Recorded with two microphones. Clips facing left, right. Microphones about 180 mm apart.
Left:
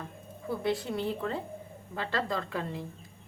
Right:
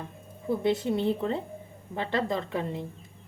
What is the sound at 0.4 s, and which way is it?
A woman's voice, 20° right (ahead or behind).